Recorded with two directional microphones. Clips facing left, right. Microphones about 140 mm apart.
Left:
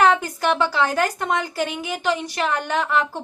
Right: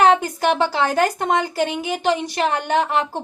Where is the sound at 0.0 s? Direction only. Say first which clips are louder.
Right 2 dB; 20° right (ahead or behind).